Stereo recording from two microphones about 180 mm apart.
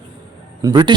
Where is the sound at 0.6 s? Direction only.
25° right (ahead or behind).